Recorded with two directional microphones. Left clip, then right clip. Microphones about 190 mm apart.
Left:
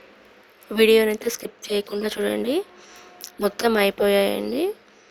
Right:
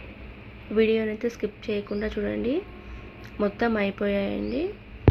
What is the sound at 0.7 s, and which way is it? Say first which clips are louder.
Speech: left 7 dB; 60° left (ahead or behind).